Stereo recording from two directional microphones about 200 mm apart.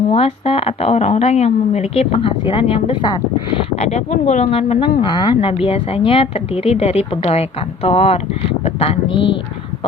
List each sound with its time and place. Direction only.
0.1 s speech: 30° left (ahead or behind)